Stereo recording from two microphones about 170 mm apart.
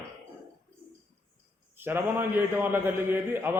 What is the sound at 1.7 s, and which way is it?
A man's voice, 10° right (ahead or behind).